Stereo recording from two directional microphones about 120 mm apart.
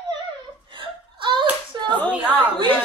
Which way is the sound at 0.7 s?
45° right (ahead or behind).